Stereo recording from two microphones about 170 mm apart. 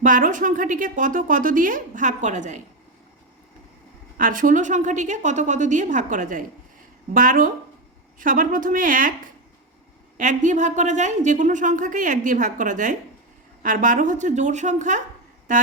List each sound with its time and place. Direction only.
0.0 s speech: 50° right (ahead or behind)
4.2 s speech: 50° right (ahead or behind)